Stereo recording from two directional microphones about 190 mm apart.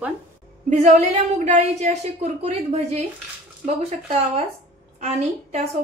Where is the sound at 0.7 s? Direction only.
35° right (ahead or behind).